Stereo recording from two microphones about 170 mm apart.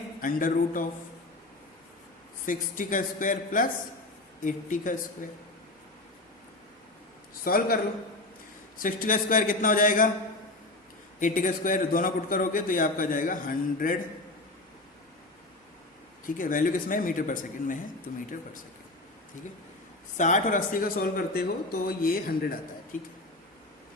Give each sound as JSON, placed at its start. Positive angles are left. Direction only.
{"t": 0.2, "sound": "speech", "side_deg": 55}
{"t": 2.5, "sound": "a man's voice", "side_deg": 50}
{"t": 7.4, "sound": "speech", "side_deg": 60}
{"t": 8.8, "sound": "a man's voice", "side_deg": 55}
{"t": 11.2, "sound": "a man's voice", "side_deg": 50}
{"t": 16.2, "sound": "a man's voice", "side_deg": 50}
{"t": 20.1, "sound": "a man's voice", "side_deg": 50}